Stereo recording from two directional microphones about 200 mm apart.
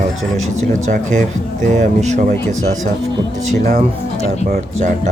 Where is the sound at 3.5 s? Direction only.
45° right (ahead or behind).